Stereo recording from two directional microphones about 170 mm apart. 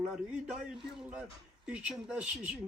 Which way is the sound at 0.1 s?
5° right (ahead or behind).